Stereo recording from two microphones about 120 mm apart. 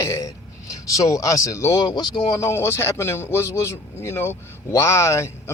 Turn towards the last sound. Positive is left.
turn(degrees=25)  # may be behind; listen again after turning